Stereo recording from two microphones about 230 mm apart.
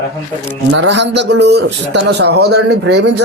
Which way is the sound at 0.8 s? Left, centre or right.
Right.